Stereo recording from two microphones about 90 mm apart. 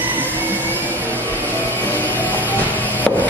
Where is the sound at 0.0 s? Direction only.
20° right (ahead or behind).